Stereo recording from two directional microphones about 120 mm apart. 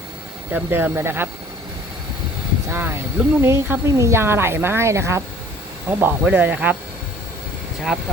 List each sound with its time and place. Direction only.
0.5 s speech: 15° right (ahead or behind)
2.6 s speech: 20° right (ahead or behind)